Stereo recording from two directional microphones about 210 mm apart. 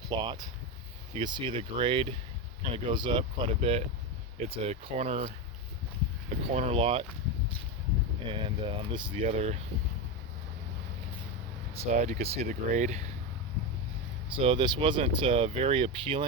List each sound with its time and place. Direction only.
0.1 s speech: 20° right (ahead or behind)
6.5 s speech: 30° right (ahead or behind)
8.3 s speech: 25° right (ahead or behind)
11.7 s speech: 30° right (ahead or behind)
14.3 s speech: 25° right (ahead or behind)